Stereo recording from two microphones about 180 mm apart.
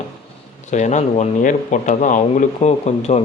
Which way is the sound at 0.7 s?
40° left (ahead or behind).